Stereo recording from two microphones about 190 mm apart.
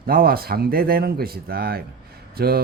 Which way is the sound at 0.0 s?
50° right (ahead or behind).